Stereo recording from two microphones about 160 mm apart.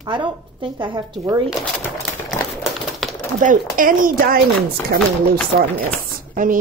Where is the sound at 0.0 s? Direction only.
30° right (ahead or behind).